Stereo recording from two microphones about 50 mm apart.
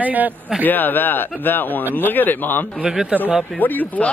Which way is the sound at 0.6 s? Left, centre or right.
Left.